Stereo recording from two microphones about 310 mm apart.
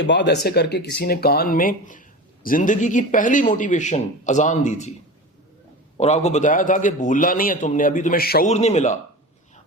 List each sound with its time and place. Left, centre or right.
0.0 s speech: left
6.0 s speech: left